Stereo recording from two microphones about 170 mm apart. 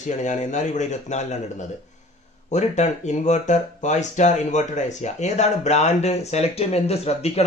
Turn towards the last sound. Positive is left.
turn(degrees=35)  # may be behind; listen again after turning